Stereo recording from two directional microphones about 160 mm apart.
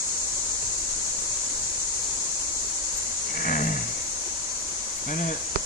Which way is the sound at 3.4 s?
60° left (ahead or behind).